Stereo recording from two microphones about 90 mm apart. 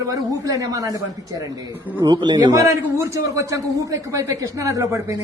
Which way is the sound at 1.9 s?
55° right (ahead or behind).